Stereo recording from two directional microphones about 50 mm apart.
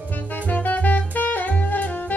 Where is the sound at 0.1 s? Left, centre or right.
Left.